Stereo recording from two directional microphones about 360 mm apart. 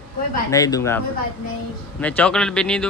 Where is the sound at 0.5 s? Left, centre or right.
Centre.